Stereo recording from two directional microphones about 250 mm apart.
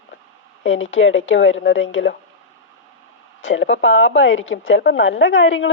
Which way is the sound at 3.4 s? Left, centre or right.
Left.